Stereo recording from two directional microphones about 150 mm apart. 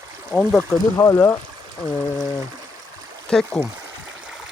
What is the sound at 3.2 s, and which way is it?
Speech, 5° left (ahead or behind).